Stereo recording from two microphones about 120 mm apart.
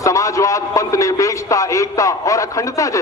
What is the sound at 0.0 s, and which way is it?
A man's voice, 25° left (ahead or behind).